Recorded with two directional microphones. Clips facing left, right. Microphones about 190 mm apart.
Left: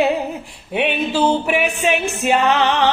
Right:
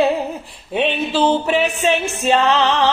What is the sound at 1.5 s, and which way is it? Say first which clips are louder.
Music: right 1 dB; 15° left (ahead or behind).